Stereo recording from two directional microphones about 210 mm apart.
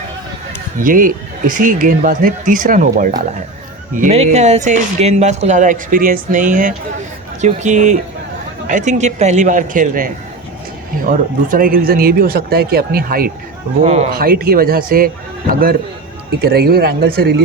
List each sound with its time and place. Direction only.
0.8 s speech: 40° right (ahead or behind)
13.8 s speech: 30° right (ahead or behind)
14.1 s speech: 45° right (ahead or behind)
16.4 s speech: 45° right (ahead or behind)